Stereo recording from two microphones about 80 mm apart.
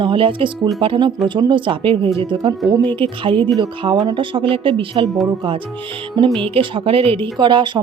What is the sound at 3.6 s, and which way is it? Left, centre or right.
Speech, right.